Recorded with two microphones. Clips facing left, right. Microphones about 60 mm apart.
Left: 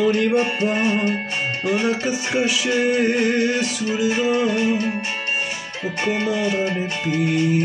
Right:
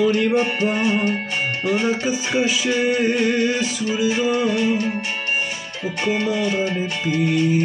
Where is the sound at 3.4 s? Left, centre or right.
Left.